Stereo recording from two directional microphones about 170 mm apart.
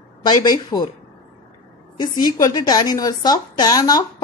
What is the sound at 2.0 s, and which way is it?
A woman's voice, 25° left (ahead or behind).